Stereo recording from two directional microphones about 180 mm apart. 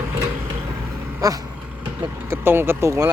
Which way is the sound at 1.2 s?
20° right (ahead or behind).